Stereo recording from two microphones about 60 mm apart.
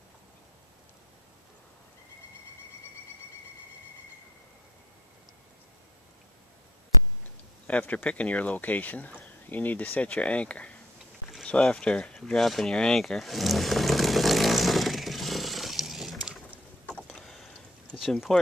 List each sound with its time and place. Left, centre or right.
7.8 s speech: left
12.4 s a sound: centre
18.0 s speech: centre